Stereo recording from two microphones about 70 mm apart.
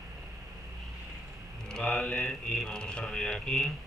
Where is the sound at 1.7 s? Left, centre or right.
Centre.